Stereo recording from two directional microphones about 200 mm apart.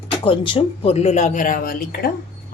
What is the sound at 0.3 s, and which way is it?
Speech, 25° left (ahead or behind).